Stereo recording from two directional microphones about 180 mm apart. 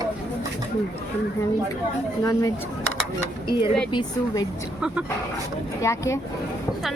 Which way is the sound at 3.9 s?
25° left (ahead or behind).